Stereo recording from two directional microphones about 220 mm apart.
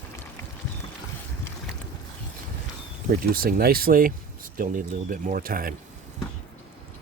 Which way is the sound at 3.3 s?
45° right (ahead or behind).